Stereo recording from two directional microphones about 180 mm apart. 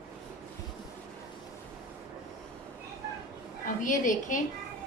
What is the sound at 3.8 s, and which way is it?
Speech, 45° left (ahead or behind).